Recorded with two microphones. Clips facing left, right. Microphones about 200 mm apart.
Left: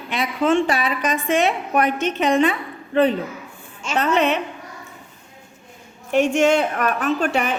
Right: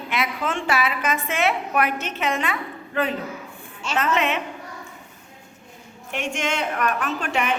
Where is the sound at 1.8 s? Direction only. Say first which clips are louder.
Left 6 dB; 5° right (ahead or behind).